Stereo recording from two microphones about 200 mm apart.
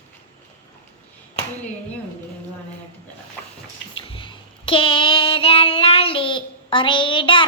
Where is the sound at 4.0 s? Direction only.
25° left (ahead or behind).